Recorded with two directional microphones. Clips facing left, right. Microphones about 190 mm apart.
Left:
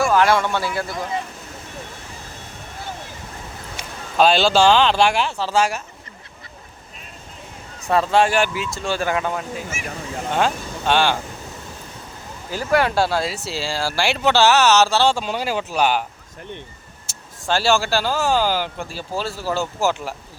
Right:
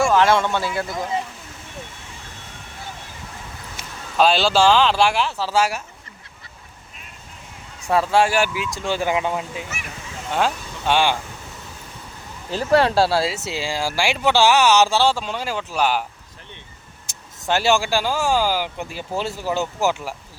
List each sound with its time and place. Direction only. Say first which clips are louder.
0.3 s speech: even; 20° right (ahead or behind)
3.8 s speech: left 1 dB; centre (ahead or behind)
7.8 s speech: left 1 dB; 10° right (ahead or behind)
12.5 s speech: right 2 dB; 30° right (ahead or behind); by 15.1 s 15° right (ahead or behind)
15.1 s speech: left 3 dB; 5° left (ahead or behind)
17.1 s speech: even; 20° right (ahead or behind)